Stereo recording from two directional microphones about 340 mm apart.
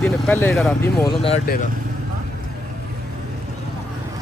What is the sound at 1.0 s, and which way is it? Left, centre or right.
Speech, centre.